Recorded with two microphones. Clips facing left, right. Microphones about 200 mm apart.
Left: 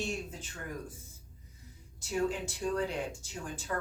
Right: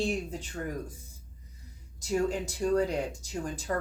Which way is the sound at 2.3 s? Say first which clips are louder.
Right 6 dB; 40° right (ahead or behind).